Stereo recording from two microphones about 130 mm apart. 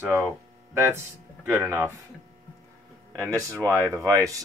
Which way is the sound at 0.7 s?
20° right (ahead or behind).